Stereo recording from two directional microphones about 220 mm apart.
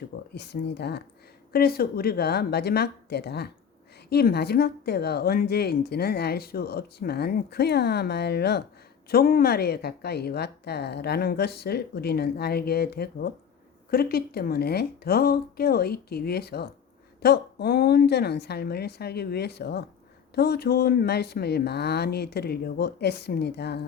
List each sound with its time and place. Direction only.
0.3 s speech: 50° left (ahead or behind)